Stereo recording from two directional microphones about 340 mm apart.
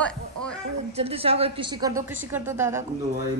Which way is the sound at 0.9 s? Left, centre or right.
Centre.